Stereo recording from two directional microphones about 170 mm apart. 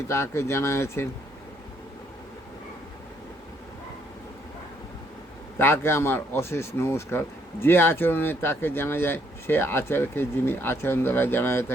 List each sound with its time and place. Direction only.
0.1 s speech: 15° left (ahead or behind)
5.5 s speech: 15° left (ahead or behind)